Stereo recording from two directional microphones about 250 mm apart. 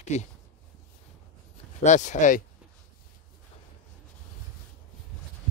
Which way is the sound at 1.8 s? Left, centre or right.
Left.